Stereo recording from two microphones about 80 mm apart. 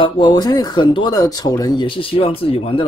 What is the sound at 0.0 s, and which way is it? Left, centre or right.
Speech, left.